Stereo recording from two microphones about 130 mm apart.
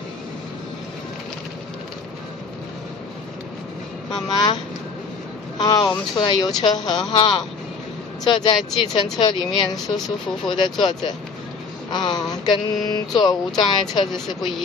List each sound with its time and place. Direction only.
4.1 s speech: 35° left (ahead or behind)
5.6 s speech: 35° left (ahead or behind)